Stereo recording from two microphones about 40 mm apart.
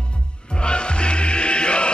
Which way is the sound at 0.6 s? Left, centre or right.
Left.